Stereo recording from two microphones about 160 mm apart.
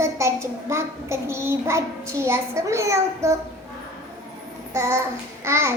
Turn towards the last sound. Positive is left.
turn(degrees=-15)  # may be behind; listen again after turning